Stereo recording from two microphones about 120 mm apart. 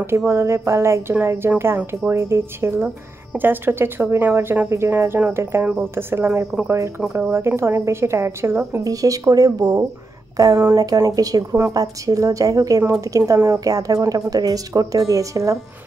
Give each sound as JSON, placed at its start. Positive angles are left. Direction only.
{"t": 0.3, "sound": "a woman's voice", "side_deg": -20}